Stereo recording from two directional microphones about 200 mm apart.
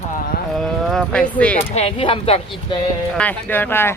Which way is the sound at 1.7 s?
30° left (ahead or behind).